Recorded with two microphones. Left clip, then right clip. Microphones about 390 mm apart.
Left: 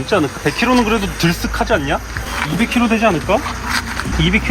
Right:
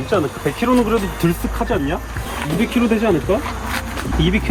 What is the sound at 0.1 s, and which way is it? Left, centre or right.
Speech, left.